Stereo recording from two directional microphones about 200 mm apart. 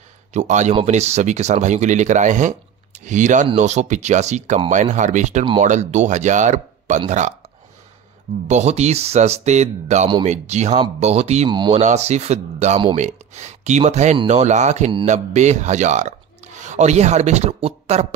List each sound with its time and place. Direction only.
0.3 s speech: 35° right (ahead or behind)
8.5 s speech: 35° right (ahead or behind)
11.8 s speech: 35° right (ahead or behind)